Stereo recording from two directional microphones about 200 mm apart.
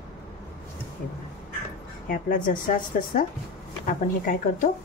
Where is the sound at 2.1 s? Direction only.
45° left (ahead or behind).